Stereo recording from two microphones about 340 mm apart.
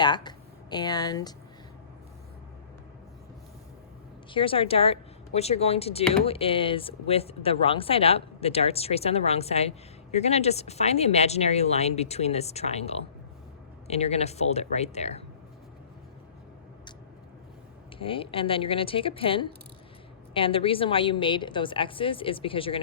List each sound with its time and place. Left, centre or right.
0.0 s speech: centre
4.3 s a woman's voice: centre
18.0 s a woman's voice: centre